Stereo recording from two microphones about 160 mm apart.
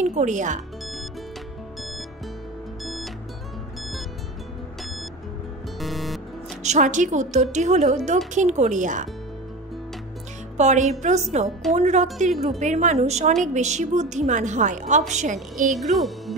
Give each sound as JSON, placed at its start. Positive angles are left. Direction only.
{"t": 0.0, "sound": "a woman's voice", "side_deg": -45}
{"t": 2.8, "sound": "music", "side_deg": 0}
{"t": 5.8, "sound": "music", "side_deg": 0}
{"t": 6.6, "sound": "a woman's voice", "side_deg": -50}
{"t": 10.6, "sound": "a woman's voice", "side_deg": -45}
{"t": 15.7, "sound": "speech", "side_deg": 0}